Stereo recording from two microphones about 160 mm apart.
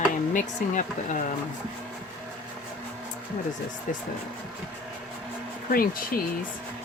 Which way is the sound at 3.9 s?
55° left (ahead or behind).